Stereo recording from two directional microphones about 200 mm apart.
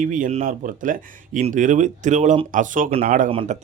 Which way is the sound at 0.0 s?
40° right (ahead or behind).